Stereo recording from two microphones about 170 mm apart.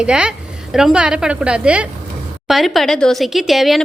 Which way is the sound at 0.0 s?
5° right (ahead or behind).